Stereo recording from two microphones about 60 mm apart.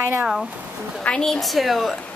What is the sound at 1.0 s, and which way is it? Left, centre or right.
Speech, centre.